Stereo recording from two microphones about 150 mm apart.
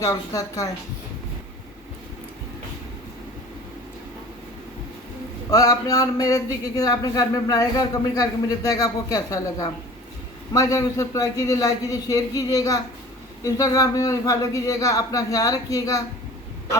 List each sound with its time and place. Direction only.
0.0 s speech: 25° left (ahead or behind)
5.5 s speech: 25° left (ahead or behind)